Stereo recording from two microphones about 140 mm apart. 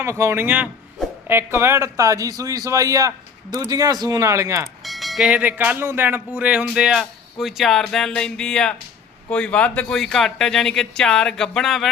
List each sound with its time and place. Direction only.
0.0 s a man's voice: 20° right (ahead or behind)
4.9 s speech: centre (ahead or behind)